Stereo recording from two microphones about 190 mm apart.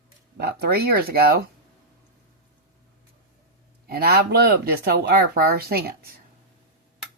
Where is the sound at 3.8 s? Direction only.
55° right (ahead or behind).